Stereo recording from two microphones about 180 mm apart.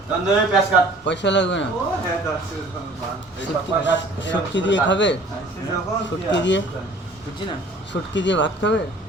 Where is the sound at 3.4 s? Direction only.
85° left.